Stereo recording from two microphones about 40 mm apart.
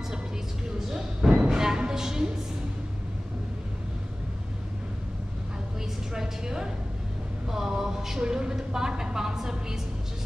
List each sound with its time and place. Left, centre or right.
0.7 s music: centre
6.1 s a sound: centre
8.2 s a woman's voice: centre